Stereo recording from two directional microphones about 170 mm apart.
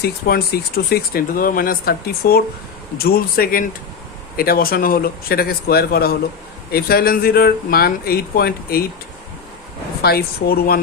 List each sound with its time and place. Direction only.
0.0 s speech: 65° left (ahead or behind)
10.0 s speech: 70° left (ahead or behind)